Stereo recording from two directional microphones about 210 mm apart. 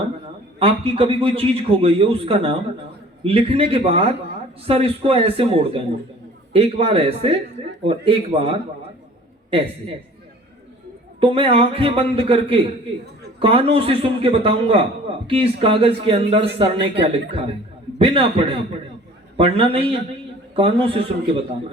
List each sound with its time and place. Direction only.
0.6 s a man's voice: 25° right (ahead or behind)
11.2 s a man's voice: 25° right (ahead or behind)